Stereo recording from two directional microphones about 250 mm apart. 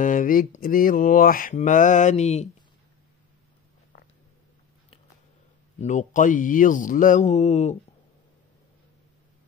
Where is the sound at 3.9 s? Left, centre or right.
Left.